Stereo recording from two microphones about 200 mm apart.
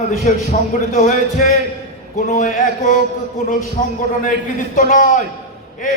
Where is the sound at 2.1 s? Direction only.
40° left (ahead or behind).